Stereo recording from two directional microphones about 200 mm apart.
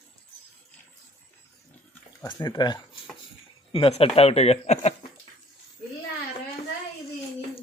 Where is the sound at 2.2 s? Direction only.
20° left (ahead or behind).